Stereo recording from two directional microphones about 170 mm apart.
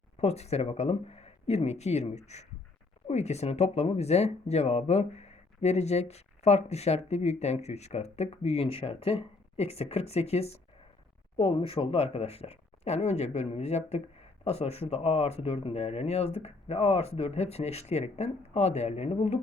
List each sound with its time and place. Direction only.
0.2 s speech: 40° left (ahead or behind)